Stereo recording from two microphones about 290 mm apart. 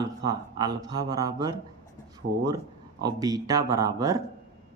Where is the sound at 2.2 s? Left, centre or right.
Right.